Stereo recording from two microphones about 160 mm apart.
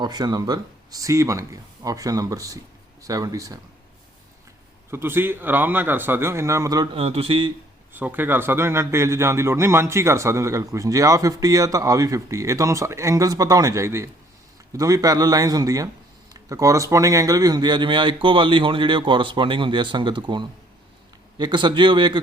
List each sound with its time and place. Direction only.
0.0 s a man's voice: 25° right (ahead or behind)
4.9 s a man's voice: 15° right (ahead or behind)
6.9 s speech: 40° right (ahead or behind)
7.9 s a man's voice: 10° right (ahead or behind); by 22.2 s 30° right (ahead or behind)